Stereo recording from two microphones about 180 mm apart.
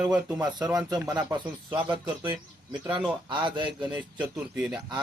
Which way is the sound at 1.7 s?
25° right (ahead or behind).